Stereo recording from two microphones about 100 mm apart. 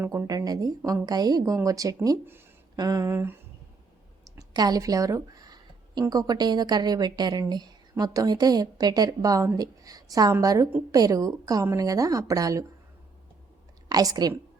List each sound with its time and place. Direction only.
0.1 s speech: 35° right (ahead or behind)
3.1 s a sound: 25° right (ahead or behind)
4.2 s a woman's voice: 40° right (ahead or behind)
13.8 s speech: 40° right (ahead or behind)